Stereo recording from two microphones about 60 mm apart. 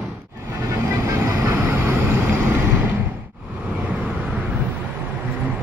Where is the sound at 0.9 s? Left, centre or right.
Right.